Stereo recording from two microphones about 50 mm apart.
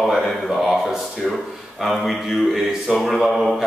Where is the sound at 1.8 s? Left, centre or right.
Centre.